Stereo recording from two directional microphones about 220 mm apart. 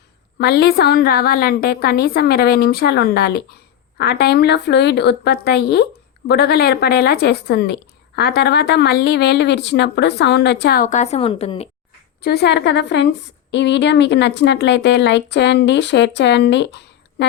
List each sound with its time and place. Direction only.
0.3 s a woman's voice: 45° left (ahead or behind); by 11.7 s 25° left (ahead or behind)
12.2 s a woman's voice: 45° left (ahead or behind)